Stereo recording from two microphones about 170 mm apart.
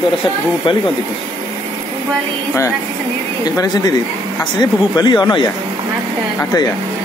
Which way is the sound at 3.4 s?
20° left (ahead or behind).